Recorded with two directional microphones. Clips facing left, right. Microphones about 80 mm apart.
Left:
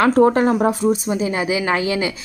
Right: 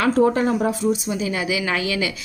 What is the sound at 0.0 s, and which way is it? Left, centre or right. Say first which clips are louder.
Speech: left 4 dB; left.